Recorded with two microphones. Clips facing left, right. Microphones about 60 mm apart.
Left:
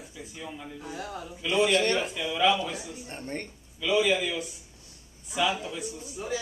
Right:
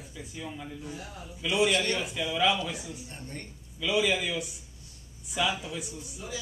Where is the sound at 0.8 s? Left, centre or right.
Left.